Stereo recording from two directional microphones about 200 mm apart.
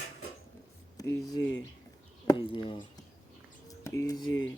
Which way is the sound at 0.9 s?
15° left (ahead or behind).